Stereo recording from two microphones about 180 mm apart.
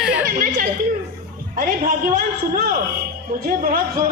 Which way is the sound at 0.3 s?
50° right (ahead or behind).